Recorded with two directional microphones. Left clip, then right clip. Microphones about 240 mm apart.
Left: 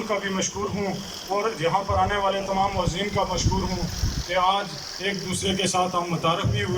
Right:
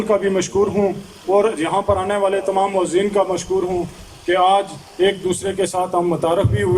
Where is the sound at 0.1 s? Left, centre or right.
Right.